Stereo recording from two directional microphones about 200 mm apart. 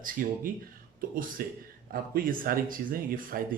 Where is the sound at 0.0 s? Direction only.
40° right (ahead or behind).